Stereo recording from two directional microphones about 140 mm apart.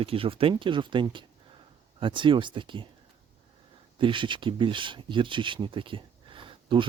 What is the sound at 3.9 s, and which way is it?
Speech, 35° right (ahead or behind).